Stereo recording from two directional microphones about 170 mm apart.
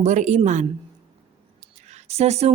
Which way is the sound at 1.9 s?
40° right (ahead or behind).